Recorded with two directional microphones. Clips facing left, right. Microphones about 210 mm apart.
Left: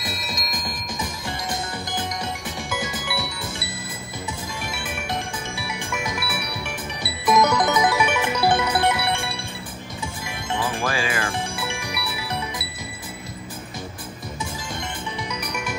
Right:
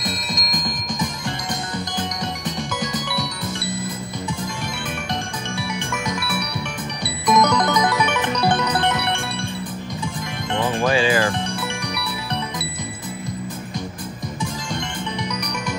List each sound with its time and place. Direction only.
0.0 s music: 5° left (ahead or behind)
6.0 s music: 5° left (ahead or behind)
10.6 s music: 20° right (ahead or behind)